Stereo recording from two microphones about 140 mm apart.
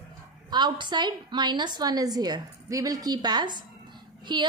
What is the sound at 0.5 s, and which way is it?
A woman's voice, 30° right (ahead or behind).